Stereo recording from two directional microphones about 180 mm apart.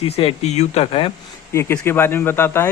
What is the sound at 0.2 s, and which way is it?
Speech, 35° left (ahead or behind).